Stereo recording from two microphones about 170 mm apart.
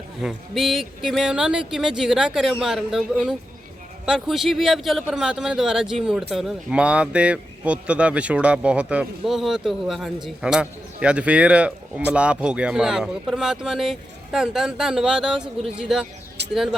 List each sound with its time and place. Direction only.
0.2 s a man's voice: centre (ahead or behind)
16.4 s bird: 80° right